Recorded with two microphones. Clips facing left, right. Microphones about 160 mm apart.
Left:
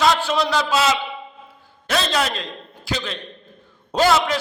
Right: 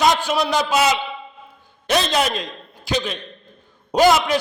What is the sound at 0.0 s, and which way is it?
A man's voice, 15° right (ahead or behind).